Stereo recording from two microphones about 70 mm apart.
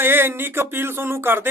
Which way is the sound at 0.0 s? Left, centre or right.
Right.